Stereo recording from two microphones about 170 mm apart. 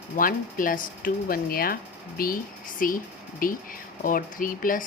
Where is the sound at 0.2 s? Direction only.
55° left (ahead or behind).